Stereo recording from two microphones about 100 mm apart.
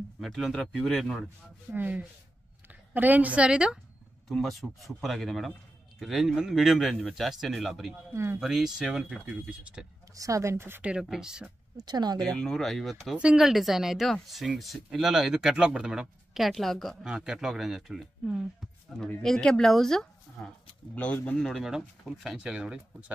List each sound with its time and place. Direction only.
0.2 s speech: centre (ahead or behind)
1.7 s a woman's voice: 15° right (ahead or behind)
4.3 s speech: 5° left (ahead or behind)
8.1 s speech: 30° right (ahead or behind)
8.4 s speech: 5° right (ahead or behind)
10.1 s speech: 35° right (ahead or behind); by 11.5 s 10° right (ahead or behind)
11.7 s speech: 45° right (ahead or behind)
12.2 s speech: 5° left (ahead or behind)
19.2 s speech: 5° left (ahead or behind)
21.4 s speech: centre (ahead or behind)